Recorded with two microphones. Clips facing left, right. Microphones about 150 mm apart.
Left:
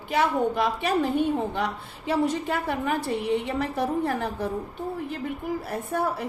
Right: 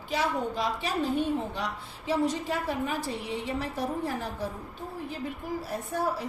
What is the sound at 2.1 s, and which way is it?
A woman's voice, 60° left (ahead or behind).